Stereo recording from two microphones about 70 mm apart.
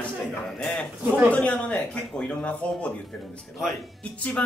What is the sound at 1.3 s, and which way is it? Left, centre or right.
Speech, centre.